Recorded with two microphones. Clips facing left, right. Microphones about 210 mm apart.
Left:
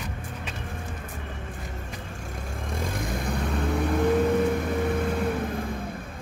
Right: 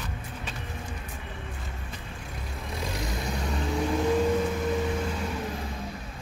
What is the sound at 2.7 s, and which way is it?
Vehicle, 50° left (ahead or behind).